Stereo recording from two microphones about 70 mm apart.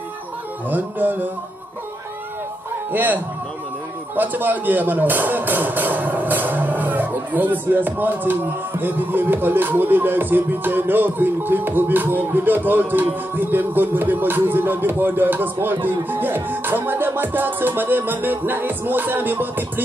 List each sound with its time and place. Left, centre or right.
0.7 s speech: right
2.9 s a man's voice: right